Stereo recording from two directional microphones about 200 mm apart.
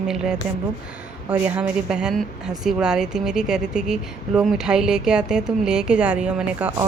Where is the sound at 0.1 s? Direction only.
5° right (ahead or behind).